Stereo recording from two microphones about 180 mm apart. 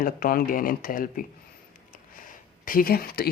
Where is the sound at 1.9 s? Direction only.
50° left (ahead or behind).